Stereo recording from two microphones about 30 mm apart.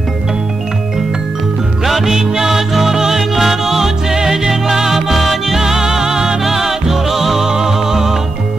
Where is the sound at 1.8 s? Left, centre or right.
Centre.